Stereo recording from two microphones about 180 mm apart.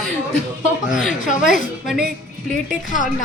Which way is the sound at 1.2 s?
45° left (ahead or behind).